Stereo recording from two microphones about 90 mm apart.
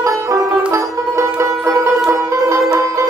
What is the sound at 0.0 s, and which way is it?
Music, 35° right (ahead or behind).